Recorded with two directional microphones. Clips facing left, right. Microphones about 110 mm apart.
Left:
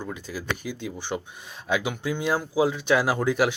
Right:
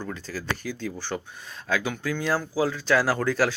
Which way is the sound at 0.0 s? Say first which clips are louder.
Even; 15° left (ahead or behind).